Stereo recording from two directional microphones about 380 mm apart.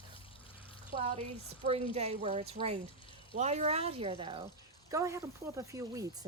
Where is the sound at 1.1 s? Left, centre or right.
Centre.